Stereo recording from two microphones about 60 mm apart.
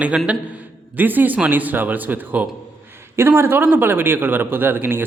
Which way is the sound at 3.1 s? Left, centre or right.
Right.